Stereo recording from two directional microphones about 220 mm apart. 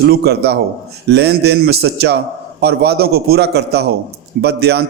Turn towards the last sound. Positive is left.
turn(degrees=-45)  # may be behind; listen again after turning